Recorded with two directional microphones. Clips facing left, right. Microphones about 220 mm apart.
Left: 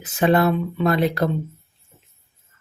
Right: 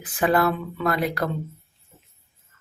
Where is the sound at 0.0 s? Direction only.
25° left (ahead or behind).